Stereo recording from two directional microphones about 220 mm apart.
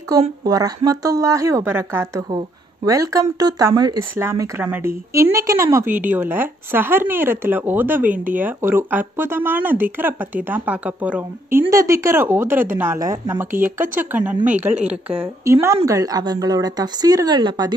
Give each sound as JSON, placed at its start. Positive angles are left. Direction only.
{"t": 0.4, "sound": "a woman's voice", "side_deg": -15}